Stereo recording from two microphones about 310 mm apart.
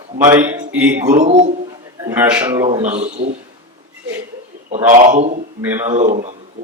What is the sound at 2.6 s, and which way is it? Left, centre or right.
Speech, right.